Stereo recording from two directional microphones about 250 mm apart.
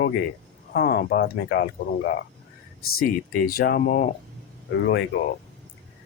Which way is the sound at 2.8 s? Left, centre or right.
Left.